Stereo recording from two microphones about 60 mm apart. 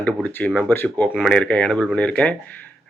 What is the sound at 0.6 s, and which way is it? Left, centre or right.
Speech, left.